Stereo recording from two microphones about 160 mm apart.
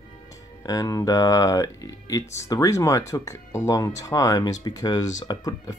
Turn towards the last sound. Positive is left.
turn(degrees=20)  # may be behind; listen again after turning